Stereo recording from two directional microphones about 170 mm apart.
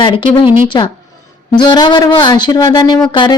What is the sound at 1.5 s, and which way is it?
A woman's voice, 25° left (ahead or behind).